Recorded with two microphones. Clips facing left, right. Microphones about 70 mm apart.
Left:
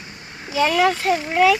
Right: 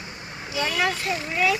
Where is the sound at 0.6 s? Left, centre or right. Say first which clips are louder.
Left 8 dB; left.